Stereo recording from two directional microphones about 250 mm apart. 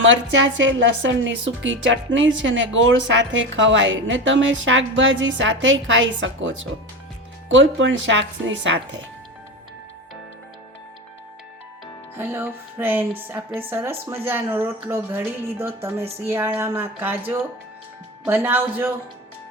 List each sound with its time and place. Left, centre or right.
0.0 s a woman's voice: right
12.1 s speech: centre